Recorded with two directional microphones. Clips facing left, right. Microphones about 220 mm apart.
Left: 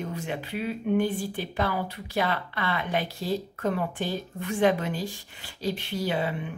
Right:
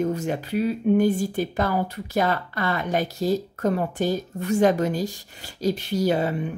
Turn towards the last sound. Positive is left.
turn(degrees=-40)  # may be behind; listen again after turning